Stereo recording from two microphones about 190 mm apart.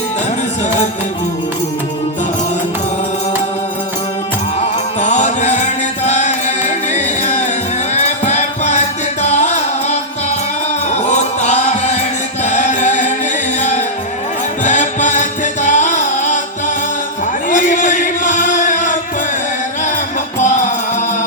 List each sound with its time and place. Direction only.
4.6 s music: 40° left (ahead or behind)
11.1 s music: 35° left (ahead or behind)
12.5 s chant: 40° left (ahead or behind)
13.6 s music: 40° left (ahead or behind)
17.5 s music: 40° left (ahead or behind)